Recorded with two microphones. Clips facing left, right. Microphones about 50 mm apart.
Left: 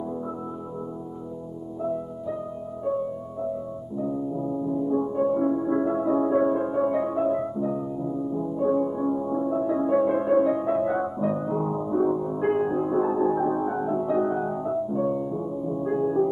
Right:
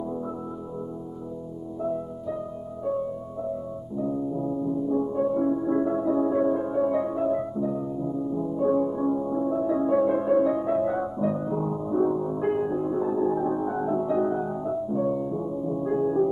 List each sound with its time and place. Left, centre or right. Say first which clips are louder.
1.8 s music: even; centre
4.8 s music: left 2 dB; left
8.5 s music: even; centre
13.7 s music: even; centre